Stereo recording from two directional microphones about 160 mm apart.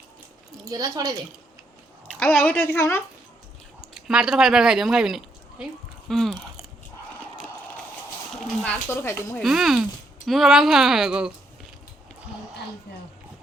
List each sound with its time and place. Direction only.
0.6 s a woman's voice: 25° right (ahead or behind)
2.0 s a woman's voice: 5° left (ahead or behind)
3.9 s speech: 5° right (ahead or behind)
6.1 s chewing: centre (ahead or behind)
8.6 s speech: 10° left (ahead or behind)
9.4 s speech: centre (ahead or behind)
12.9 s speech: 90° left